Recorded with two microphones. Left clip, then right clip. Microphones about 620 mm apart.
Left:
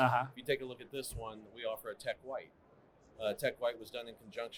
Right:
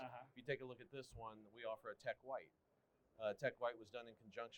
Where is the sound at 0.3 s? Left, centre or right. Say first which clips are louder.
Left 11 dB; right.